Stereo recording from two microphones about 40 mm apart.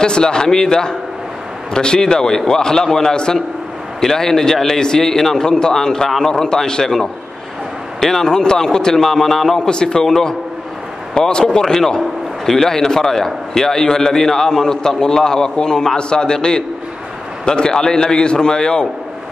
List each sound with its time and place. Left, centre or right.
0.0 s a man's voice: centre
9.7 s a man's voice: centre